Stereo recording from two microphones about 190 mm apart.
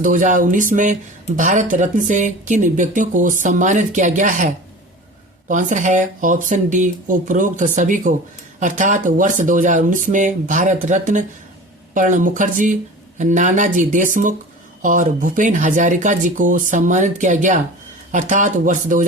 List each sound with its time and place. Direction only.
0.0 s speech: 45° right (ahead or behind)